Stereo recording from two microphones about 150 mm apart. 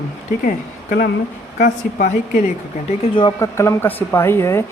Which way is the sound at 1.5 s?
55° left (ahead or behind).